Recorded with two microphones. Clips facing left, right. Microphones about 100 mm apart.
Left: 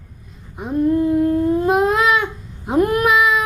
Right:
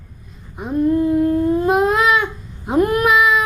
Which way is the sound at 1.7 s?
15° right (ahead or behind).